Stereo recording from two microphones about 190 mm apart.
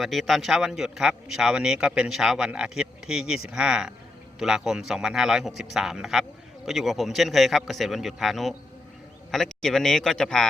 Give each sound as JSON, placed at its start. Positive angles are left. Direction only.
{"t": 0.0, "sound": "a man's voice", "side_deg": 0}